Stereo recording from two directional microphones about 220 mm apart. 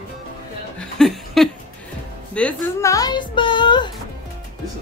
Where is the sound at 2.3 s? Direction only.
5° left (ahead or behind); by 3.9 s 20° left (ahead or behind).